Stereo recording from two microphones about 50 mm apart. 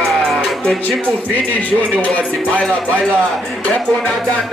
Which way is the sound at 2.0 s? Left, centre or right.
Left.